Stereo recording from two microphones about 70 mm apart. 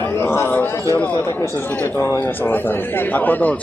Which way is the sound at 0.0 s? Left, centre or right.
Left.